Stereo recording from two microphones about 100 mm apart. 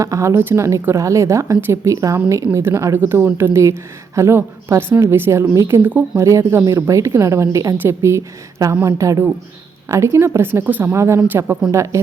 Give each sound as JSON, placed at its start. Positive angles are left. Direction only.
{"t": 0.0, "sound": "a woman's voice", "side_deg": -30}